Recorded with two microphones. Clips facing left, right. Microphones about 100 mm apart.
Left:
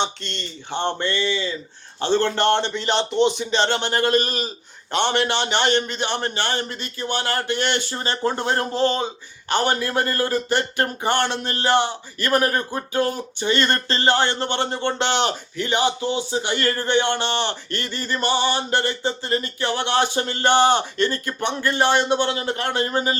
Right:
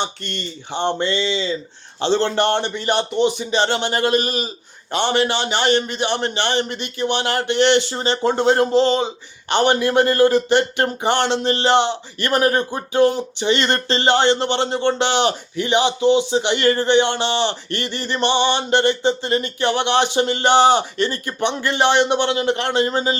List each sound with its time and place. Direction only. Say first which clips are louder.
0.7 s a man's voice: right 3 dB; 15° right (ahead or behind)